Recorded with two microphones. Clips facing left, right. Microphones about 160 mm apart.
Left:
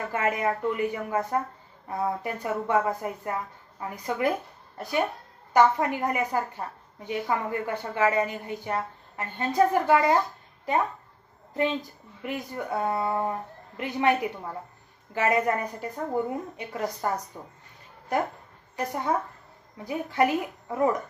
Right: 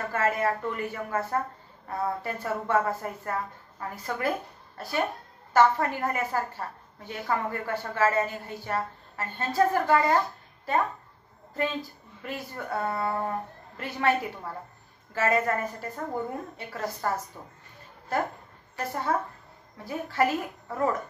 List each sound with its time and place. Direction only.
0.1 s a woman's voice: 15° left (ahead or behind)
12.2 s a woman's voice: 20° left (ahead or behind)